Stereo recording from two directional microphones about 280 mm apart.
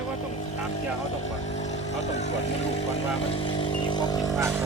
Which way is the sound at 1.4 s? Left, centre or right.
Left.